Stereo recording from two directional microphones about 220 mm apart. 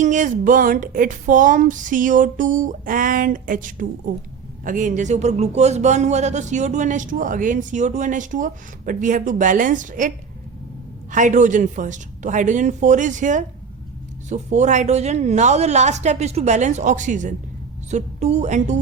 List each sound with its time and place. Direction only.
0.0 s speech: 35° right (ahead or behind)
11.1 s speech: 35° right (ahead or behind)